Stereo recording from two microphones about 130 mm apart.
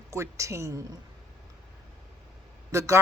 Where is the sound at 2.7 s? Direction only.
25° right (ahead or behind).